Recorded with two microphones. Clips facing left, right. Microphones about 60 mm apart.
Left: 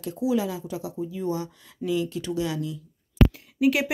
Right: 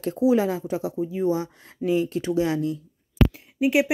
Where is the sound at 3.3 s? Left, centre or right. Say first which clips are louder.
Right 2 dB; right.